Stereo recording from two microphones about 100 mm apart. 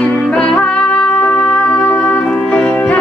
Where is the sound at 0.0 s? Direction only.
10° left (ahead or behind).